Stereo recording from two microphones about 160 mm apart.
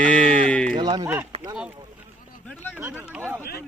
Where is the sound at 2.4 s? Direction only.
10° left (ahead or behind).